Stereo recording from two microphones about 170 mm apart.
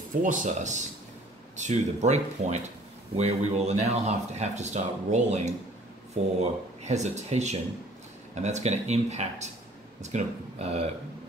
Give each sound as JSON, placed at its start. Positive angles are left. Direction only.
{"t": 0.1, "sound": "speech", "side_deg": -50}